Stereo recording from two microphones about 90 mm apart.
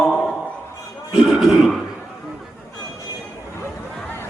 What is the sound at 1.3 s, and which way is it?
Throat clearing, centre (ahead or behind).